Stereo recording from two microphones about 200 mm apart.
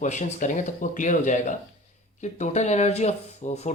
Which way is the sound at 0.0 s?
35° left (ahead or behind).